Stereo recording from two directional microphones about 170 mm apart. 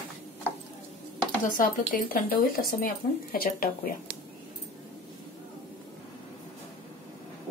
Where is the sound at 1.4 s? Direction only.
55° left (ahead or behind).